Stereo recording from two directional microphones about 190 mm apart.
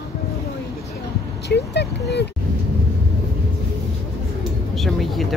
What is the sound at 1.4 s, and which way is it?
Speech, 60° left (ahead or behind).